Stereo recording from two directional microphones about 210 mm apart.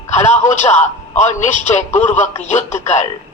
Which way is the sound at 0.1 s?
35° left (ahead or behind).